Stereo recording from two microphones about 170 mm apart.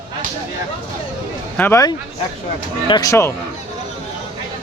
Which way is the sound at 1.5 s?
15° left (ahead or behind).